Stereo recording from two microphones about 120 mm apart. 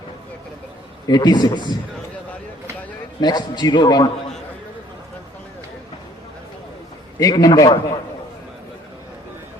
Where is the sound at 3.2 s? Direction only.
35° left (ahead or behind).